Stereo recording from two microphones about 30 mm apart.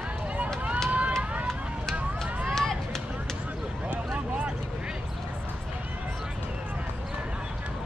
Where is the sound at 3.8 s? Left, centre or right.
Right.